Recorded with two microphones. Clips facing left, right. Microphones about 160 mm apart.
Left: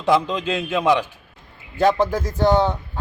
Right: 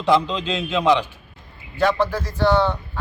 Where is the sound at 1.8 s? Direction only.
40° left (ahead or behind).